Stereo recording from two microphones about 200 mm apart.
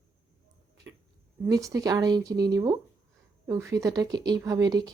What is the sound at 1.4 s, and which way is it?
A woman's voice, 15° right (ahead or behind).